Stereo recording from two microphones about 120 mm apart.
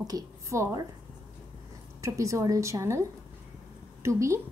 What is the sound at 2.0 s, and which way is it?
A woman's voice, 25° right (ahead or behind).